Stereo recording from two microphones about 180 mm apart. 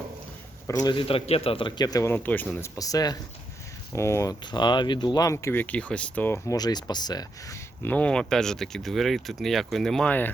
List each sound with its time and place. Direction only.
0.7 s a man's voice: 20° left (ahead or behind); by 10.2 s 5° left (ahead or behind)